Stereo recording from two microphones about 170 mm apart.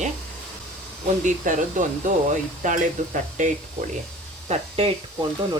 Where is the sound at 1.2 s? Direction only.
50° right (ahead or behind).